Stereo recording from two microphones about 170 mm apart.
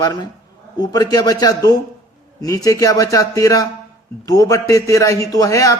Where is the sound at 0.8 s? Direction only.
25° left (ahead or behind).